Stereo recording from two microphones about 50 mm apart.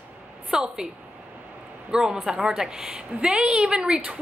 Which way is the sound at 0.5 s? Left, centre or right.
Centre.